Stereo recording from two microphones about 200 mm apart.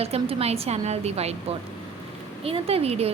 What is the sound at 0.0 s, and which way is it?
A woman's voice, 30° right (ahead or behind).